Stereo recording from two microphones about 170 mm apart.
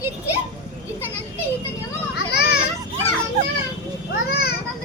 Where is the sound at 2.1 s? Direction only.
75° left (ahead or behind).